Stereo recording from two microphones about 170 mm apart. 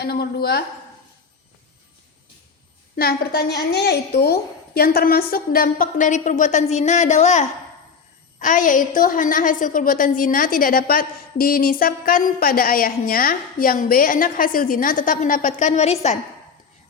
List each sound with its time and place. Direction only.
0.0 s a woman's voice: 65° left (ahead or behind)
2.9 s a woman's voice: 65° left (ahead or behind); by 16.1 s 40° left (ahead or behind)